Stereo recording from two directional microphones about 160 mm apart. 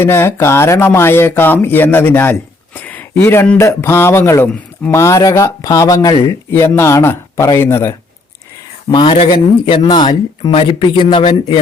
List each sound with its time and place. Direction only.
0.0 s a man's voice: 15° left (ahead or behind)
8.9 s speech: 30° left (ahead or behind)